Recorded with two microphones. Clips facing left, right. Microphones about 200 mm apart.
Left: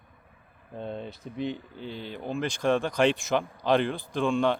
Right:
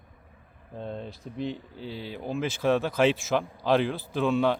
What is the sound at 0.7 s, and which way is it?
Speech, centre (ahead or behind).